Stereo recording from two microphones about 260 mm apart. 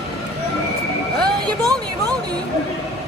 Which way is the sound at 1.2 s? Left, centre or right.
Centre.